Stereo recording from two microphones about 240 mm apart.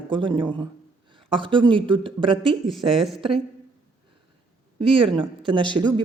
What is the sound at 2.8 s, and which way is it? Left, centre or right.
Speech, centre.